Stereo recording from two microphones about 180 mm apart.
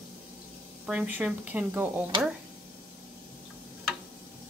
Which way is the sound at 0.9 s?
10° right (ahead or behind).